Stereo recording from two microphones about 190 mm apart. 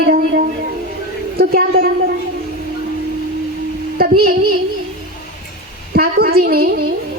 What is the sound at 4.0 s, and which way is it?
Female singing, 55° right (ahead or behind).